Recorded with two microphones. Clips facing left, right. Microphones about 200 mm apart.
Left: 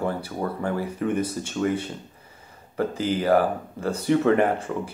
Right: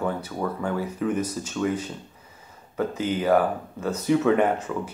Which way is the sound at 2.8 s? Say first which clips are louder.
Left 1 dB; 30° left (ahead or behind).